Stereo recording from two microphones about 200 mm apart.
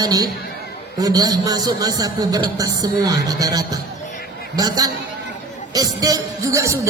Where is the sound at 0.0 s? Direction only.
20° right (ahead or behind).